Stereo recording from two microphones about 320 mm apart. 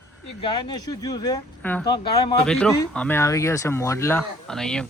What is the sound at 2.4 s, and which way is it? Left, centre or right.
Speech, centre.